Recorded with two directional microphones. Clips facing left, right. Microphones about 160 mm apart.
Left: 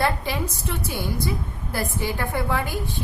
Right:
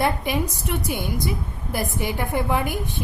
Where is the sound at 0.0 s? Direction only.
15° right (ahead or behind).